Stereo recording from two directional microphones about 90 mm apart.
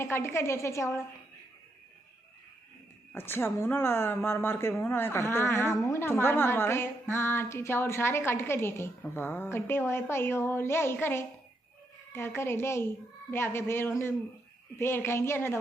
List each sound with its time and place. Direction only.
0.0 s a woman's voice: 30° left (ahead or behind)
3.2 s a woman's voice: 25° left (ahead or behind)